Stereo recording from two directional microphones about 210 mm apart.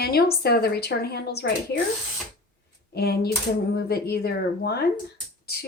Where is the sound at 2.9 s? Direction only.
50° left (ahead or behind).